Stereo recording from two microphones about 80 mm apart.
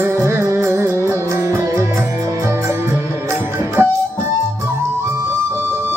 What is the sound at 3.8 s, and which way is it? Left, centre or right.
Music, right.